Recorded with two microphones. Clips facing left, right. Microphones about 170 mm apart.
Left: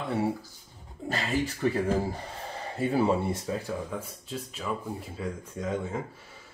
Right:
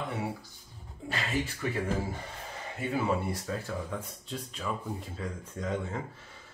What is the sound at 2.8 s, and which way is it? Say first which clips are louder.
Speech: left 5 dB; 30° left (ahead or behind).